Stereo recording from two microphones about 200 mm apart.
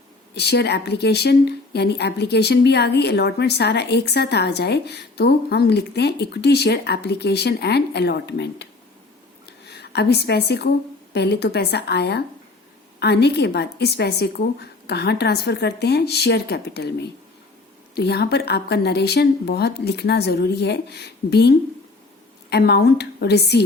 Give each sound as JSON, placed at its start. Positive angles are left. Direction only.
{"t": 0.3, "sound": "speech", "side_deg": 55}